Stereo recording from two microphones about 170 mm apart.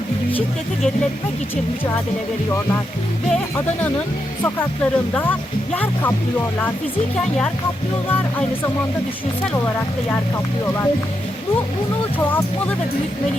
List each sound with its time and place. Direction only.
3.3 s speech: 10° left (ahead or behind)
10.1 s speech: 15° left (ahead or behind)
12.3 s speech: 10° left (ahead or behind)